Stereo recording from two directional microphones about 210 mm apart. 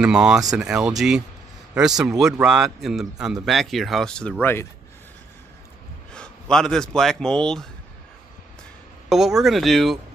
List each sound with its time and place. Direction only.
0.0 s a man's voice: 5° right (ahead or behind)
6.1 s speech: 5° left (ahead or behind)
9.1 s a man's voice: centre (ahead or behind)